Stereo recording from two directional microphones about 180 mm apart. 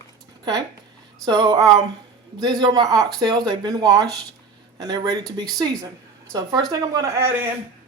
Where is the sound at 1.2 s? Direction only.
25° right (ahead or behind).